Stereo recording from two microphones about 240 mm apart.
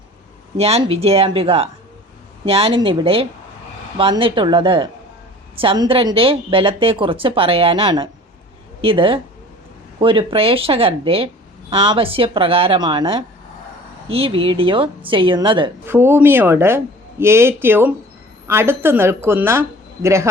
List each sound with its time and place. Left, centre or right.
0.5 s a woman's voice: right